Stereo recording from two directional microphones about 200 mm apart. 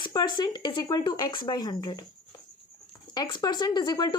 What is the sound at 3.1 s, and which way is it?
A woman's voice, 20° left (ahead or behind).